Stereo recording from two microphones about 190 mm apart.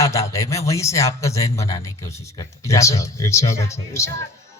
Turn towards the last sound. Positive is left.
turn(degrees=15)  # may be behind; listen again after turning